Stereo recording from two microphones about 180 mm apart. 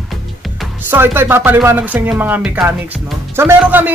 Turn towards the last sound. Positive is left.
turn(degrees=-10)  # may be behind; listen again after turning